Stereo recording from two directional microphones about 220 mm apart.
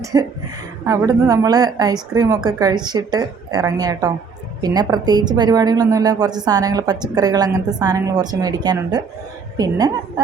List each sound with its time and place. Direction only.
0.0 s a woman's voice: 15° right (ahead or behind)